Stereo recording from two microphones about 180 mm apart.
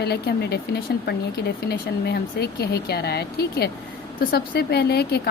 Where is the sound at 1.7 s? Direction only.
65° left (ahead or behind).